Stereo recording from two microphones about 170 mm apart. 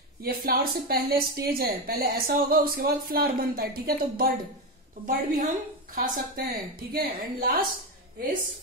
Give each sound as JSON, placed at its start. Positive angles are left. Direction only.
{"t": 0.2, "sound": "a woman's voice", "side_deg": -60}